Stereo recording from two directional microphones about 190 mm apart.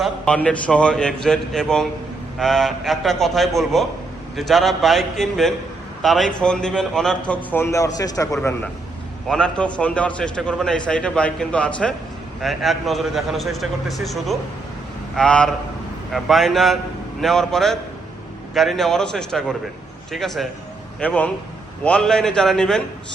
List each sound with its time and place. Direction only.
0.0 s a man's voice: 5° left (ahead or behind)
8.4 s a man's voice: 5° left (ahead or behind)